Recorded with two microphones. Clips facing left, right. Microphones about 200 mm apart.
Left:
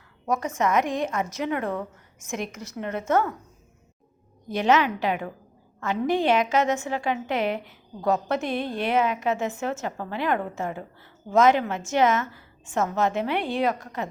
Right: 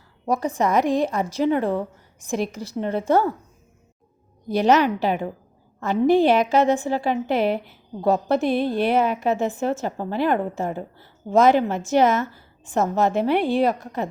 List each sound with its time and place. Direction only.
0.3 s a woman's voice: 35° right (ahead or behind)
4.4 s a woman's voice: 35° right (ahead or behind)